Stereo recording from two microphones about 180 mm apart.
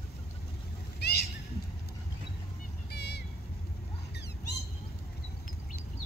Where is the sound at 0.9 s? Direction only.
65° left (ahead or behind).